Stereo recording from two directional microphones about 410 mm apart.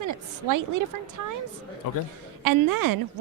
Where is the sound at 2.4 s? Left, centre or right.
Right.